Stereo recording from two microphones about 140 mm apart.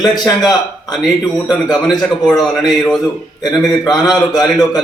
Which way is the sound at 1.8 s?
30° left (ahead or behind).